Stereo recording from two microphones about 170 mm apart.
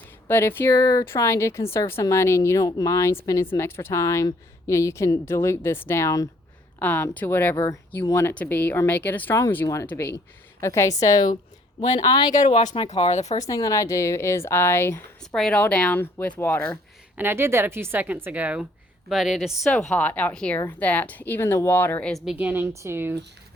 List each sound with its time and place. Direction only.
0.3 s speech: 10° left (ahead or behind)
11.8 s speech: 35° left (ahead or behind)
12.3 s speech: 45° left (ahead or behind)
13.4 s speech: 20° left (ahead or behind)
15.2 s speech: 5° left (ahead or behind)
17.2 s a woman's voice: 15° right (ahead or behind)